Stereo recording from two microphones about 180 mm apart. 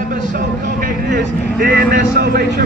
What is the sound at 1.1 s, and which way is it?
Vehicle, 60° right (ahead or behind).